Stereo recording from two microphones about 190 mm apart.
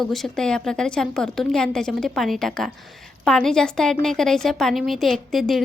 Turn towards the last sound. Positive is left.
turn(degrees=0)  # may be behind; listen again after turning